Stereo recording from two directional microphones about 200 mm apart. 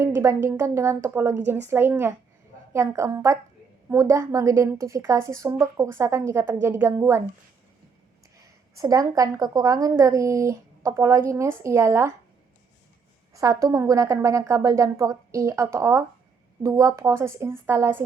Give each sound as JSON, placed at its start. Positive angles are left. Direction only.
{"t": 0.0, "sound": "speech", "side_deg": -15}
{"t": 8.8, "sound": "speech", "side_deg": -15}
{"t": 13.3, "sound": "speech", "side_deg": -15}